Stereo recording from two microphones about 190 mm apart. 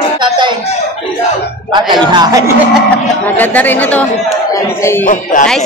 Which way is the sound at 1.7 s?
25° right (ahead or behind).